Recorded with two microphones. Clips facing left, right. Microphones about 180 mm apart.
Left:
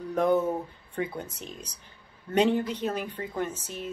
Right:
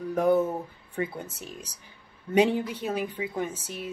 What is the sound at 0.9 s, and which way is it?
A woman's voice, 5° right (ahead or behind).